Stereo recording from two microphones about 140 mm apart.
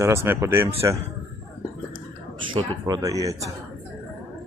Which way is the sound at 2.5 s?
30° right (ahead or behind).